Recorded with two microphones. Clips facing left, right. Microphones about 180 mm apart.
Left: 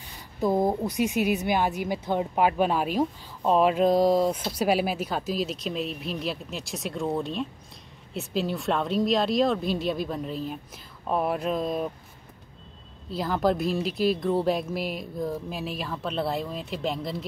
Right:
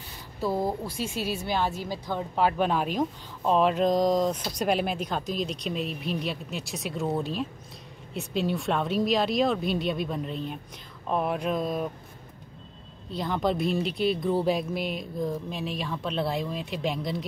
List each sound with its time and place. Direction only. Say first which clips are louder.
0.4 s a woman's voice: left 4 dB; 20° left (ahead or behind); by 11.9 s centre (ahead or behind)
13.1 s speech: left 2 dB; 5° left (ahead or behind)